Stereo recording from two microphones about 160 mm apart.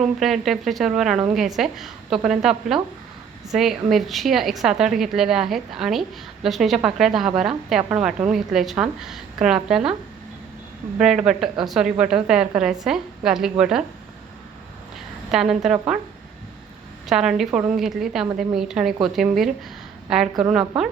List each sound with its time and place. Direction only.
0.0 s a woman's voice: centre (ahead or behind)
10.9 s a woman's voice: 5° right (ahead or behind)
15.3 s a woman's voice: centre (ahead or behind)
17.1 s a woman's voice: 5° right (ahead or behind)